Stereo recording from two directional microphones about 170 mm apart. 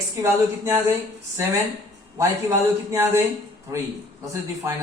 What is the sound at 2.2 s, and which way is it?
Speech, 20° right (ahead or behind).